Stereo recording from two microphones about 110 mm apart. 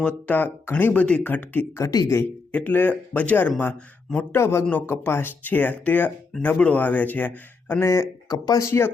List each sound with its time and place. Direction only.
0.0 s speech: 15° left (ahead or behind)
1.9 s speech: 35° left (ahead or behind)
2.1 s speech: 15° left (ahead or behind); by 8.6 s 35° left (ahead or behind)